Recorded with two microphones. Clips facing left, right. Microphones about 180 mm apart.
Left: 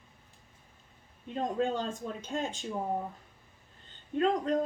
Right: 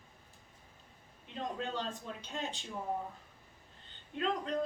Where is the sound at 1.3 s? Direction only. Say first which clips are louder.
Left 8 dB; 45° left (ahead or behind).